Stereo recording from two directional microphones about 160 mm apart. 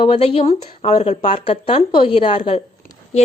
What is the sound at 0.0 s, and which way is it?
Speech, 35° left (ahead or behind).